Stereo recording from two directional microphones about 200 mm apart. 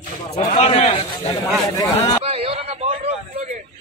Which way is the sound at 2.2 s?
30° right (ahead or behind).